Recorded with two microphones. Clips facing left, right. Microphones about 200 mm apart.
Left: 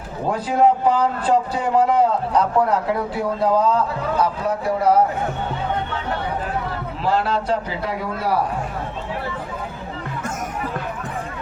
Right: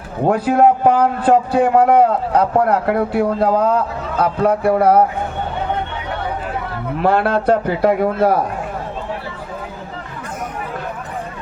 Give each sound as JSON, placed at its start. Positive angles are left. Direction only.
{"t": 0.3, "sound": "a man's voice", "side_deg": -60}
{"t": 7.0, "sound": "a man's voice", "side_deg": -60}